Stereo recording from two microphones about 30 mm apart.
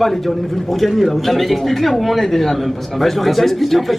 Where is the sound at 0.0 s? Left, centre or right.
Centre.